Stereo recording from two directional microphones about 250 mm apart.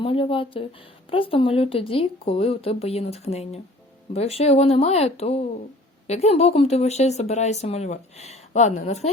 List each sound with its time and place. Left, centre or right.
0.0 s speech: left